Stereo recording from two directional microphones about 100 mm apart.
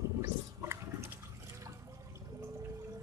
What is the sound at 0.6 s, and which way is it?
Water, 30° right (ahead or behind).